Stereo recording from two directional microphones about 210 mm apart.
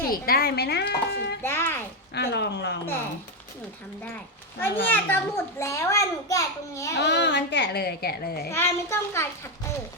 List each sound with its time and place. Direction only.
0.1 s a child's voice: 45° left (ahead or behind)
1.4 s a child's voice: 10° left (ahead or behind)
2.1 s a child's voice: 50° left (ahead or behind)
4.9 s a child's voice: 10° left (ahead or behind)
7.0 s a child's voice: 55° left (ahead or behind)
8.4 s a child's voice: 10° left (ahead or behind)